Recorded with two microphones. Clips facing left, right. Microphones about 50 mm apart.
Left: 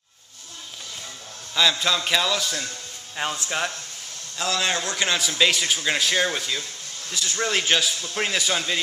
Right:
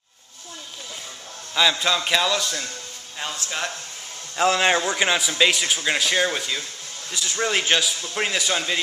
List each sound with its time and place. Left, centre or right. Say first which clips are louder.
1.5 s a man's voice: right 1 dB; centre
3.2 s speech: left 3 dB; centre
4.4 s a man's voice: right 6 dB; right
4.8 s a man's voice: right 3 dB; centre